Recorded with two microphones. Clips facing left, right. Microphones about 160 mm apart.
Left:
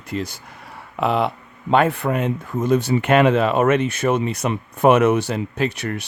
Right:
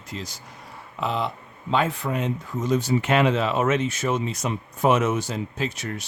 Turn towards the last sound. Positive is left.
turn(degrees=65)  # may be behind; listen again after turning